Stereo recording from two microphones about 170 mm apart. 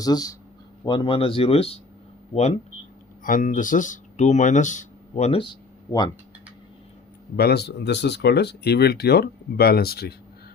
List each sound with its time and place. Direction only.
0.0 s speech: 20° left (ahead or behind); by 2.6 s 40° left (ahead or behind)
3.2 s speech: 50° left (ahead or behind)
7.3 s speech: 70° left (ahead or behind)